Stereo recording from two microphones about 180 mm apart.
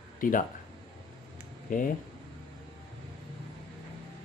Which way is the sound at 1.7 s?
50° left (ahead or behind).